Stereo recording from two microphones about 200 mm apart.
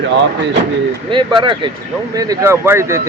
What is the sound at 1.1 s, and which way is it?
Speech, 25° right (ahead or behind).